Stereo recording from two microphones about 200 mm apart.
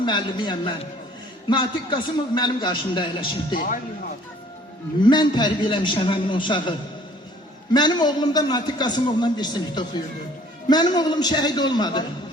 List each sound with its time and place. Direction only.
0.0 s a man's voice: 20° left (ahead or behind)
5.0 s a man's voice: 20° left (ahead or behind)